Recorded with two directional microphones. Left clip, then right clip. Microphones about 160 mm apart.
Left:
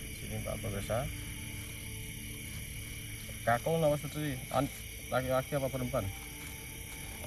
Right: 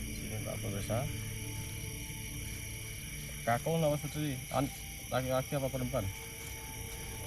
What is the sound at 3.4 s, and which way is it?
Speech, 15° left (ahead or behind).